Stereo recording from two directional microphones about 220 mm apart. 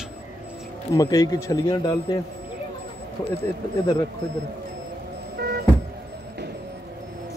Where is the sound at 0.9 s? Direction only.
15° left (ahead or behind).